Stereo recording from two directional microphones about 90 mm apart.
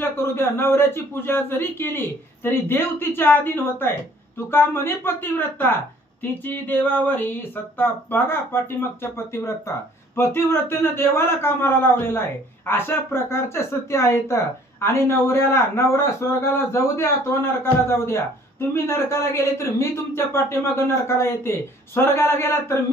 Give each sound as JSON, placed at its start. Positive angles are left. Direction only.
{"t": 0.0, "sound": "speech", "side_deg": 25}